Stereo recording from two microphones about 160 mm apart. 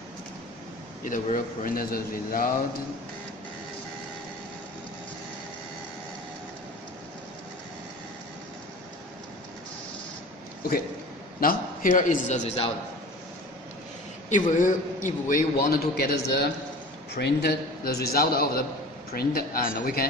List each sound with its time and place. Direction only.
1.0 s a man's voice: 55° left (ahead or behind)
11.3 s a man's voice: 60° left (ahead or behind); by 12.7 s 40° left (ahead or behind)
14.3 s a man's voice: 50° left (ahead or behind); by 20.1 s 70° left (ahead or behind)